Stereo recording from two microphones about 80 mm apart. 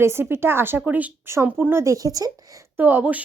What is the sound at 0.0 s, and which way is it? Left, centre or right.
A woman's voice, right.